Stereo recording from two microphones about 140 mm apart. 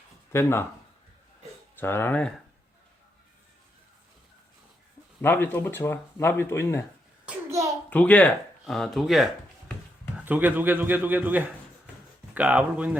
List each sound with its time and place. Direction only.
0.3 s speech: 15° left (ahead or behind)
1.7 s speech: 15° left (ahead or behind)
5.2 s speech: 15° left (ahead or behind)
7.9 s speech: 10° left (ahead or behind)
10.2 s a man's voice: 10° right (ahead or behind)